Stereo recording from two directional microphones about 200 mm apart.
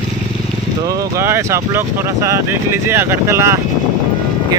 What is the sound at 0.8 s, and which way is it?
Speech, 15° right (ahead or behind).